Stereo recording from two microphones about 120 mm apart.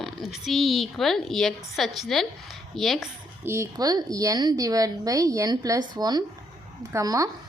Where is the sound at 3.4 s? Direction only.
20° right (ahead or behind).